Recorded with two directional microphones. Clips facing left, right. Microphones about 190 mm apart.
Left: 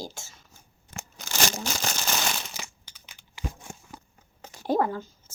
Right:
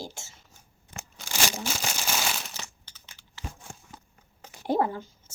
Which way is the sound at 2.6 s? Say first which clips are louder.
Left 1 dB; 15° left (ahead or behind).